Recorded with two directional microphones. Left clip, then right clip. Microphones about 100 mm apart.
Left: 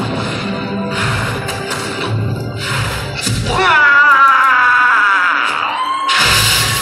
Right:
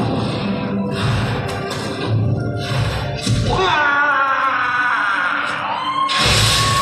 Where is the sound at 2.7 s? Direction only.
15° right (ahead or behind).